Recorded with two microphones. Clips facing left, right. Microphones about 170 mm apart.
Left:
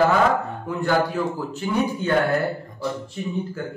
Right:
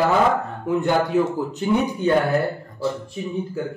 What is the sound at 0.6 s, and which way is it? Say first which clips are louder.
Speech: right 3 dB; 20° right (ahead or behind).